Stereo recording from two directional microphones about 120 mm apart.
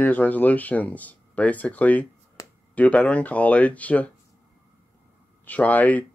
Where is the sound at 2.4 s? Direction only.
30° left (ahead or behind).